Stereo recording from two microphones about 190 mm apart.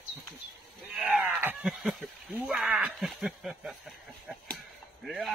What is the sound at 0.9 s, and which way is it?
Speech, 10° right (ahead or behind).